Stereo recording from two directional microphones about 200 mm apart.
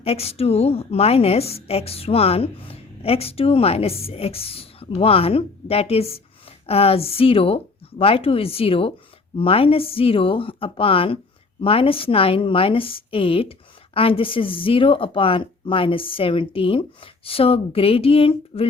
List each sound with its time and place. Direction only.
0.0 s a woman's voice: 30° left (ahead or behind)